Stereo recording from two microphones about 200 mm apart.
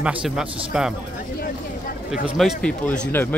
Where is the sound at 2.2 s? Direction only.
Centre (ahead or behind).